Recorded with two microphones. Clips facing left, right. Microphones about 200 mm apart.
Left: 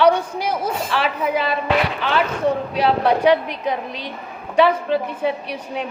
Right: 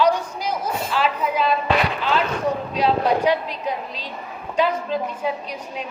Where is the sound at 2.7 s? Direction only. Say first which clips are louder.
Even; 65° left (ahead or behind).